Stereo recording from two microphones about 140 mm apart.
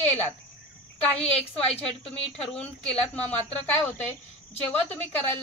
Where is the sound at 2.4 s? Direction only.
5° left (ahead or behind).